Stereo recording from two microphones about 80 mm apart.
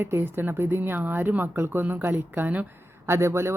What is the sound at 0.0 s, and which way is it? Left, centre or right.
Speech, right.